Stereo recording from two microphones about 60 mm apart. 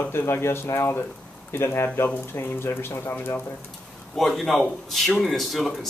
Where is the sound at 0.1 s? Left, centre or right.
Left.